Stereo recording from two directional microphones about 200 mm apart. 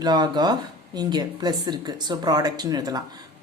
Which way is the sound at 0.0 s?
20° right (ahead or behind).